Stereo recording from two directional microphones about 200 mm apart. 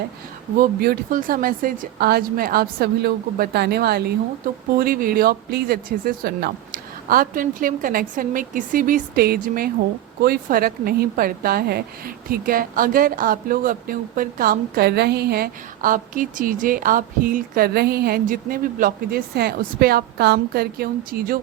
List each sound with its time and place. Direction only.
0.6 s a woman's voice: 45° right (ahead or behind)